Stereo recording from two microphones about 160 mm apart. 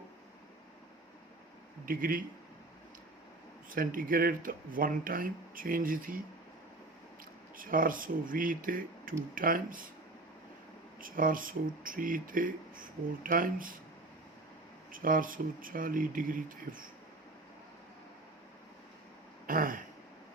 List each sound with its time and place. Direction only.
1.8 s speech: 60° right (ahead or behind)
3.7 s speech: 60° right (ahead or behind)
7.5 s speech: 60° right (ahead or behind)
11.0 s speech: 60° right (ahead or behind)
14.9 s speech: 60° right (ahead or behind)
19.5 s throat clearing: 60° right (ahead or behind)